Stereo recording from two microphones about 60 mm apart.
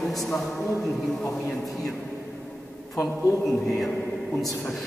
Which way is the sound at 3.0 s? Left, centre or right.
Left.